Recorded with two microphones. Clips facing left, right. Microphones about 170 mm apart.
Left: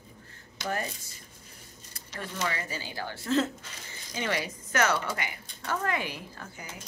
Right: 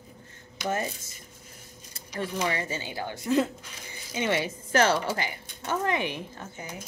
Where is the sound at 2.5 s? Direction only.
25° right (ahead or behind).